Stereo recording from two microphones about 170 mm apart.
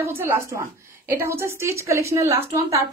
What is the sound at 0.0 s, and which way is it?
A woman's voice, 15° right (ahead or behind).